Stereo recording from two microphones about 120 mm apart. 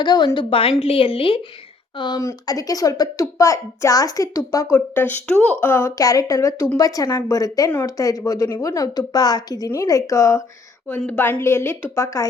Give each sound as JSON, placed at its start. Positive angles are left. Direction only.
{"t": 0.0, "sound": "a woman's voice", "side_deg": 40}
{"t": 0.3, "sound": "a woman's voice", "side_deg": 50}
{"t": 2.0, "sound": "a woman's voice", "side_deg": 40}